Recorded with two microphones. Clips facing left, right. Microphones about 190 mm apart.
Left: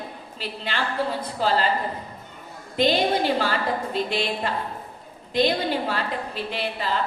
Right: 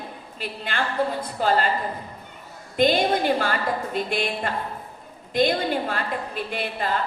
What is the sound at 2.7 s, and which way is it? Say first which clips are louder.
A woman's voice: right 1 dB; 50° right (ahead or behind).